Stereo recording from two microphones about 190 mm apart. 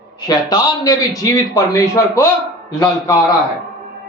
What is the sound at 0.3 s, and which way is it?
A man's voice, 20° left (ahead or behind).